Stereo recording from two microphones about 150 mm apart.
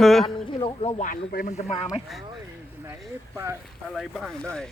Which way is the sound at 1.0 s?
75° left (ahead or behind).